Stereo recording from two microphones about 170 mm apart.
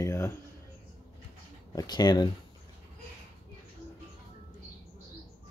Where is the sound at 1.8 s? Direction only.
25° left (ahead or behind).